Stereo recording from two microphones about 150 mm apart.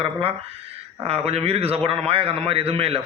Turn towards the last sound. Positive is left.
turn(degrees=-40)  # may be behind; listen again after turning